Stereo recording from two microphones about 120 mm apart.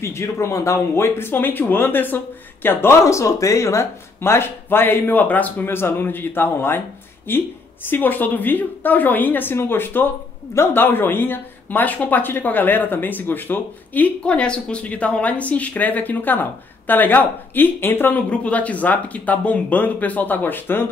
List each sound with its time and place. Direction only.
0.0 s speech: 20° left (ahead or behind)